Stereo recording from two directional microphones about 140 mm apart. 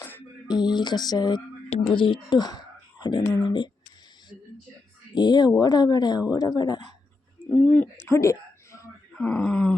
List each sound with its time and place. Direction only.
0.4 s speech: 30° left (ahead or behind)
5.1 s speech: 30° left (ahead or behind)
7.5 s speech: 10° left (ahead or behind)
9.1 s speech: 5° left (ahead or behind)